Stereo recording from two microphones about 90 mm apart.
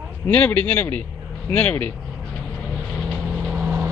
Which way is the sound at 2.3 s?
Centre (ahead or behind).